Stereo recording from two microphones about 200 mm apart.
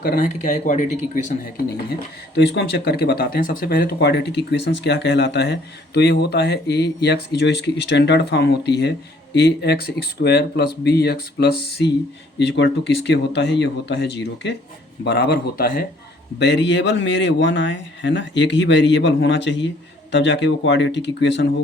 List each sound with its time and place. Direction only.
1.7 s speech: 55° left (ahead or behind)
16.4 s speech: 60° left (ahead or behind)